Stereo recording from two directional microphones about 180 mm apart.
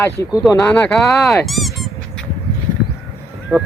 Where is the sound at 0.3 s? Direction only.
5° right (ahead or behind).